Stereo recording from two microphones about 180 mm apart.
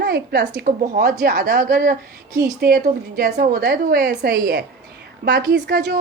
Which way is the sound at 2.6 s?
50° right (ahead or behind).